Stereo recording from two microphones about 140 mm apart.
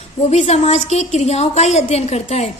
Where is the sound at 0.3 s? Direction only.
50° left (ahead or behind).